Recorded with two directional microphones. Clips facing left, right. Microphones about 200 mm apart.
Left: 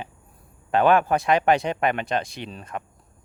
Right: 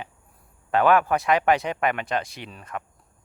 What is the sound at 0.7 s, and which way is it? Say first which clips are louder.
Speech: left 1 dB; 25° left (ahead or behind).